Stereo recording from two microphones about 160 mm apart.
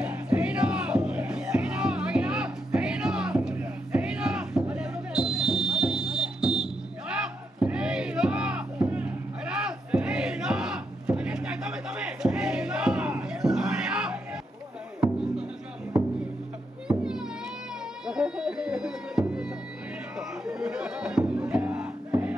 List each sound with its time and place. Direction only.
0.0 s music: 10° right (ahead or behind)
18.0 s music: 5° right (ahead or behind)